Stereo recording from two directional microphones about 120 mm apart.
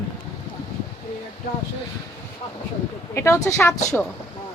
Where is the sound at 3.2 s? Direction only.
25° left (ahead or behind).